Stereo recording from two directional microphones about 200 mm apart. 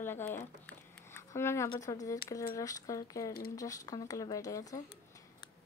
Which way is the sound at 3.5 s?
15° left (ahead or behind).